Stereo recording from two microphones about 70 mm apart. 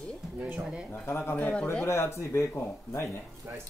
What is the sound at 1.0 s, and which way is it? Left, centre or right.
Speech, left.